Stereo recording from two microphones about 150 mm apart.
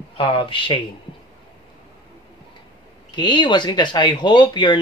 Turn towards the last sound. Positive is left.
turn(degrees=30)  # may be behind; listen again after turning